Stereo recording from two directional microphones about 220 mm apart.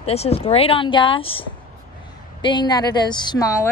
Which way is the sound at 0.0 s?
30° left (ahead or behind).